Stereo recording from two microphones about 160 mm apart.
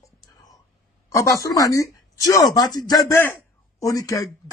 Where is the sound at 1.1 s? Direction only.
20° left (ahead or behind).